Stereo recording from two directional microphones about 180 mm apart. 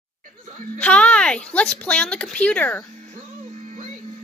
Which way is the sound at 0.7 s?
5° left (ahead or behind).